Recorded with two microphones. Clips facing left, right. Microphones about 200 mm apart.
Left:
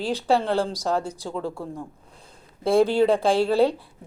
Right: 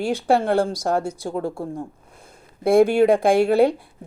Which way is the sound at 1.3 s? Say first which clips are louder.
Right 3 dB; 35° right (ahead or behind).